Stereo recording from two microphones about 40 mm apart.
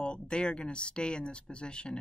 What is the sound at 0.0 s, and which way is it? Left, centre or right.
A woman's voice, left.